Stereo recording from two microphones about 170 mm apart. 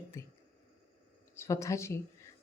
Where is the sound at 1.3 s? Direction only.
15° left (ahead or behind).